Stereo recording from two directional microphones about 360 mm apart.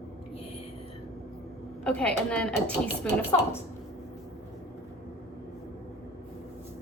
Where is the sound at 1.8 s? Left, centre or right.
Centre.